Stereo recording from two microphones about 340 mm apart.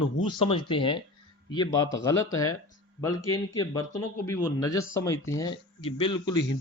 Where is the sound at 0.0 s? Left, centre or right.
Left.